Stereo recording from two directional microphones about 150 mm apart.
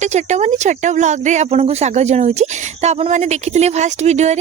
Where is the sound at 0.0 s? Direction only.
50° right (ahead or behind).